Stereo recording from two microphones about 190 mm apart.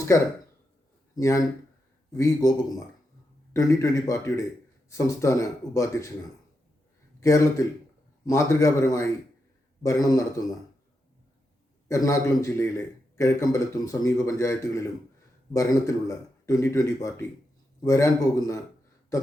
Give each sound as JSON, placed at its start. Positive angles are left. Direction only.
{"t": 1.1, "sound": "a man's voice", "side_deg": 15}
{"t": 7.2, "sound": "a man's voice", "side_deg": 15}
{"t": 11.9, "sound": "a man's voice", "side_deg": 15}